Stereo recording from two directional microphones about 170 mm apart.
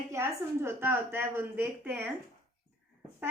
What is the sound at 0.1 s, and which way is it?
A woman's voice, 15° right (ahead or behind).